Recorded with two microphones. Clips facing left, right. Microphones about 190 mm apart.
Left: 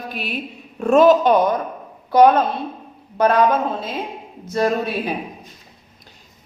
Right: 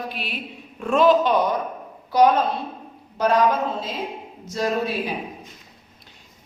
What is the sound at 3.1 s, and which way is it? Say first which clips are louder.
Speech: left 3 dB; 55° left (ahead or behind).